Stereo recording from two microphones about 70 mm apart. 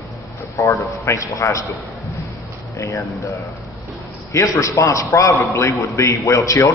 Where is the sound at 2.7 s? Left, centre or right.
Left.